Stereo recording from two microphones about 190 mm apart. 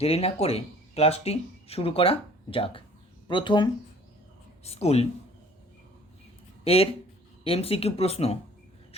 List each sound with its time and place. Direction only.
0.0 s speech: 30° left (ahead or behind)
6.7 s speech: 30° left (ahead or behind)